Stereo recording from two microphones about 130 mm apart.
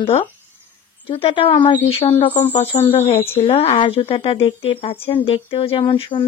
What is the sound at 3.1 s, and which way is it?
Speech, 50° left (ahead or behind).